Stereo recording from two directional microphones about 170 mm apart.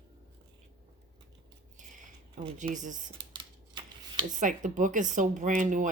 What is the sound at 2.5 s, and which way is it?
Speech, 45° right (ahead or behind).